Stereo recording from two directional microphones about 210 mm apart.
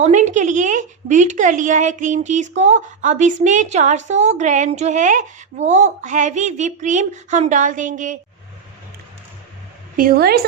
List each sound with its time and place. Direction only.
0.0 s a woman's voice: 35° right (ahead or behind)
10.0 s a woman's voice: 45° right (ahead or behind)